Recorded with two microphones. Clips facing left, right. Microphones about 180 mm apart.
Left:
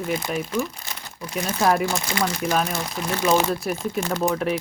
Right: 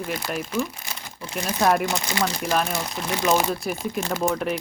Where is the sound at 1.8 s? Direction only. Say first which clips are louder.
Left 1 dB; 20° right (ahead or behind).